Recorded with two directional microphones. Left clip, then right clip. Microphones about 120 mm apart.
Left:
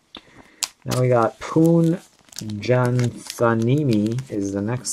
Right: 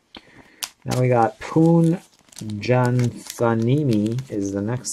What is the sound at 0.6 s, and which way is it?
Cap gun, 5° left (ahead or behind).